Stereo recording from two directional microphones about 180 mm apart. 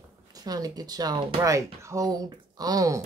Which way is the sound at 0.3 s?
20° right (ahead or behind).